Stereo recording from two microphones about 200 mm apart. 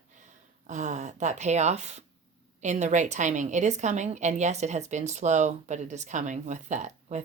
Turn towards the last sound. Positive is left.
turn(degrees=-35)  # may be behind; listen again after turning